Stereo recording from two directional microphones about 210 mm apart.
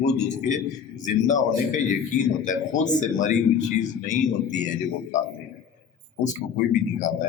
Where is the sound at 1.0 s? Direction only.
35° left (ahead or behind).